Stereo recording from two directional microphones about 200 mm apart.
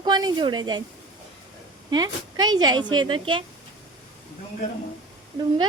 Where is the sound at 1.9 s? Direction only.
20° right (ahead or behind).